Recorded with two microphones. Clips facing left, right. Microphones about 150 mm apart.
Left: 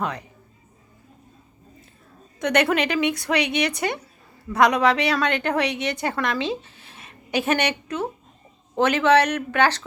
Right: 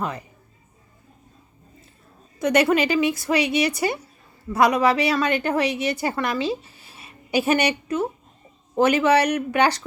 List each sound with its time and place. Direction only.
0.0 s speech: 5° right (ahead or behind)
2.4 s a woman's voice: 5° right (ahead or behind)